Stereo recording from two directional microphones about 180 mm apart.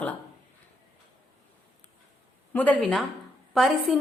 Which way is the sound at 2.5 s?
10° left (ahead or behind).